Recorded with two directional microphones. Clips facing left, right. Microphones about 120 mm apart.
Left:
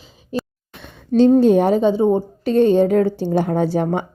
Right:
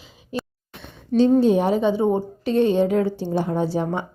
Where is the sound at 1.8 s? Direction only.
35° left (ahead or behind).